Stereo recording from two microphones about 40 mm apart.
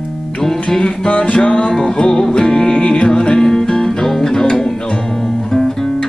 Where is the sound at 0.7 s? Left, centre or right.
Left.